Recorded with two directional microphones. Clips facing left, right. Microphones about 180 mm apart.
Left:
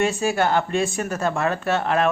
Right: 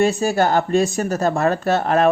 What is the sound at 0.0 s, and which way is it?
Speech, 35° right (ahead or behind).